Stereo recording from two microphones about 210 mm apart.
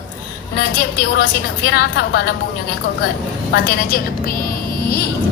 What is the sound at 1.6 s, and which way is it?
Speech, 50° left (ahead or behind).